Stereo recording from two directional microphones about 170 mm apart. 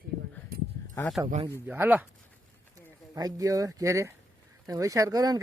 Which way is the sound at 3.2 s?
20° right (ahead or behind).